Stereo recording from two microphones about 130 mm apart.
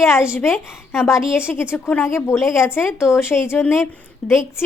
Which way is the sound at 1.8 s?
10° left (ahead or behind).